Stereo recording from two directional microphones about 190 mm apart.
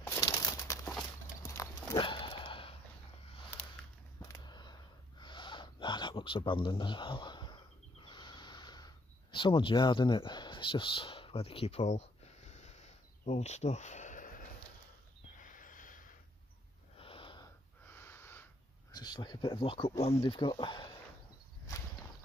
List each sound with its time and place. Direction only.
0.0 s crumpling: 15° left (ahead or behind)
1.4 s clip-clop: 15° left (ahead or behind)
4.2 s a sound: 20° left (ahead or behind); by 16.0 s 45° left (ahead or behind)
17.0 s sniff: 30° left (ahead or behind)
17.9 s a sound: 10° left (ahead or behind); by 20.2 s 30° left (ahead or behind)
20.2 s speech: 25° left (ahead or behind)